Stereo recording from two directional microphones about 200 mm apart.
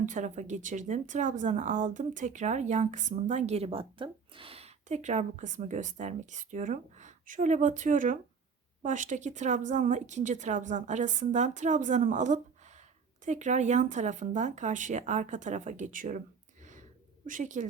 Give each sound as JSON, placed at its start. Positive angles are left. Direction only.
{"t": 0.0, "sound": "speech", "side_deg": -40}
{"t": 17.2, "sound": "speech", "side_deg": -40}